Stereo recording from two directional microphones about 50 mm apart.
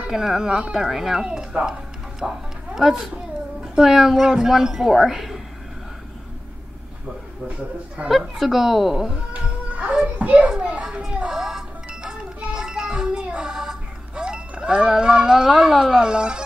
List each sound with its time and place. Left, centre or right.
0.1 s a woman's voice: centre
8.1 s a woman's voice: centre
9.3 s music: right
10.1 s children playing: right
10.6 s a woman's voice: centre
11.2 s music: centre